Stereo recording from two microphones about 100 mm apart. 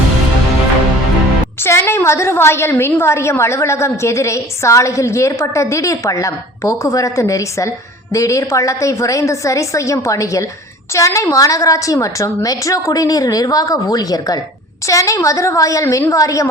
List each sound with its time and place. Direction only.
1.6 s a woman's voice: 25° left (ahead or behind)